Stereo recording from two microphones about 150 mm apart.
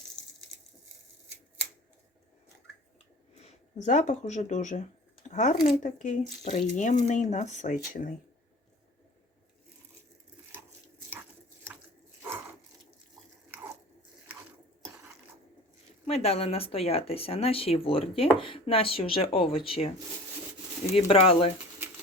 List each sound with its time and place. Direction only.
3.3 s speech: 45° left (ahead or behind)
16.0 s speech: 45° left (ahead or behind)
20.9 s speech: 40° left (ahead or behind)